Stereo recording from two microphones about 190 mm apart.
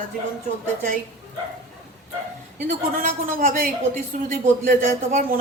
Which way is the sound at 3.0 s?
45° right (ahead or behind).